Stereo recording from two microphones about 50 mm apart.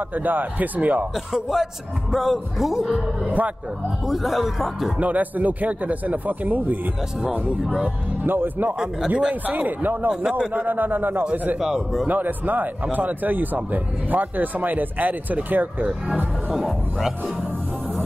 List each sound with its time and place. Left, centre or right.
0.1 s a man's voice: right
1.1 s a man's voice: centre
3.3 s a man's voice: right
4.1 s a man's voice: centre
4.9 s a man's voice: right
8.3 s speech: right
9.3 s a man's voice: right
10.2 s a man's voice: centre
10.5 s a man's voice: right
11.6 s a man's voice: centre
12.1 s a man's voice: right